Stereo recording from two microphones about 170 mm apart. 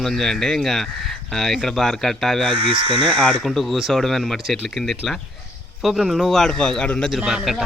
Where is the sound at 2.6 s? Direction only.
30° right (ahead or behind).